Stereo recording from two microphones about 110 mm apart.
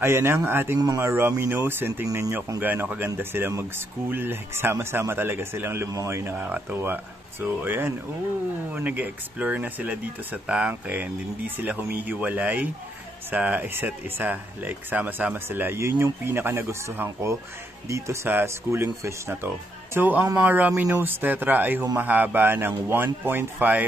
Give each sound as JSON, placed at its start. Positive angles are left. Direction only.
{"t": 0.0, "sound": "speech", "side_deg": -20}
{"t": 2.0, "sound": "speech", "side_deg": -30}
{"t": 2.6, "sound": "speech", "side_deg": -15}
{"t": 6.3, "sound": "speech", "side_deg": -15}